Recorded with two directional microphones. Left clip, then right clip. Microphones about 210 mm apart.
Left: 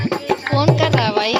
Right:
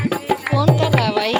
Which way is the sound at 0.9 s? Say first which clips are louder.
Left 1 dB; 10° right (ahead or behind).